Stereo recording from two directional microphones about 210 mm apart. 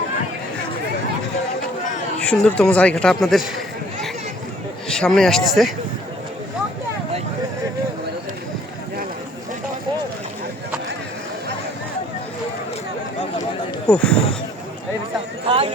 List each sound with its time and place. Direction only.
2.2 s speech: 5° left (ahead or behind)
4.9 s speech: 5° left (ahead or behind)
13.8 s speech: 5° left (ahead or behind)
15.4 s clip-clop: 25° right (ahead or behind)